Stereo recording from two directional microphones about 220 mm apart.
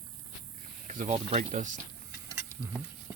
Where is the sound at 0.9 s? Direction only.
35° right (ahead or behind).